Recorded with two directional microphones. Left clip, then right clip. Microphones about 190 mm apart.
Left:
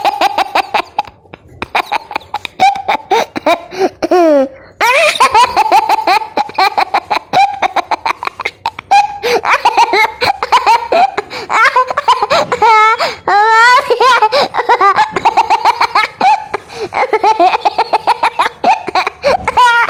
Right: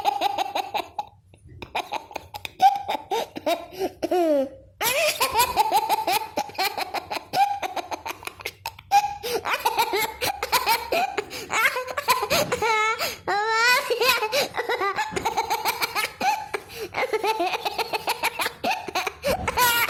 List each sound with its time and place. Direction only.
0.0 s a sound: 15° left (ahead or behind)
6.1 s chicken: 10° left (ahead or behind)
9.2 s laughter: 10° left (ahead or behind)